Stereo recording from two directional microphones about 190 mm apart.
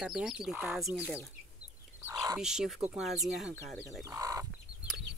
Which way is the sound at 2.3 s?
5° right (ahead or behind).